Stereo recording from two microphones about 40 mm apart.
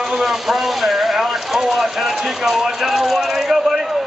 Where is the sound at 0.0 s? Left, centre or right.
Centre.